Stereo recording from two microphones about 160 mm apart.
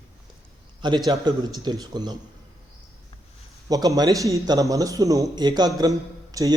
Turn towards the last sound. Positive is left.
turn(degrees=-25)  # may be behind; listen again after turning